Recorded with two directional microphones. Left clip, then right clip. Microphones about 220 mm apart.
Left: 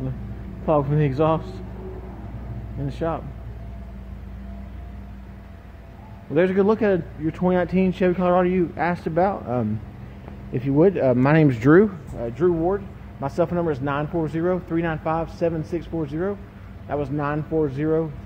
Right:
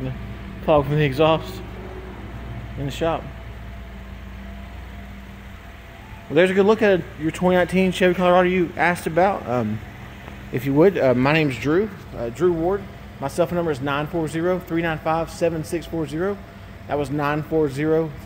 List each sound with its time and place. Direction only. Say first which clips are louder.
0.7 s speech: right 3 dB; 5° right (ahead or behind)
2.9 s speech: right 4 dB; 10° right (ahead or behind)
6.3 s speech: right 3 dB; 10° right (ahead or behind)
11.6 s speech: left 8 dB; 25° left (ahead or behind)
12.2 s speech: right 1 dB; 5° left (ahead or behind)